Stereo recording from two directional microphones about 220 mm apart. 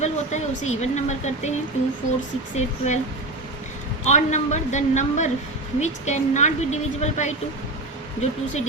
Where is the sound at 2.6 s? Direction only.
30° left (ahead or behind).